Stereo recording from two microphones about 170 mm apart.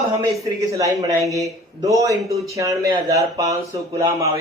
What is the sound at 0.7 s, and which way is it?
A man's voice, 20° right (ahead or behind).